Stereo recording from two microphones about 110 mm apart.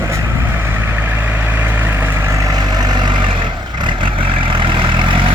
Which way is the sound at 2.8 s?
40° right (ahead or behind).